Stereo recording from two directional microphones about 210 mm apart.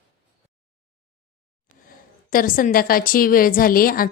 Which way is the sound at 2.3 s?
40° left (ahead or behind).